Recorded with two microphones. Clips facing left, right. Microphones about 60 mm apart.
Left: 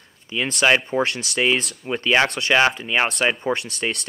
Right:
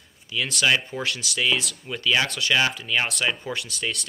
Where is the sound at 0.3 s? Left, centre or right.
Left.